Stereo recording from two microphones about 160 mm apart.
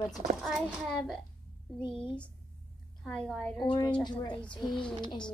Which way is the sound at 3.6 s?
30° left (ahead or behind).